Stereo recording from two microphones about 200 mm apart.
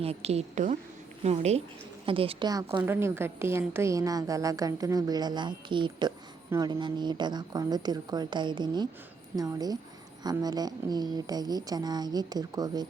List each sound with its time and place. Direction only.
0.0 s a woman's voice: 30° right (ahead or behind)